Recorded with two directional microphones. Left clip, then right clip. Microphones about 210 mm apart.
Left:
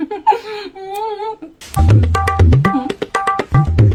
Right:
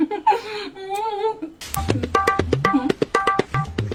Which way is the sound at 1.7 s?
Centre (ahead or behind).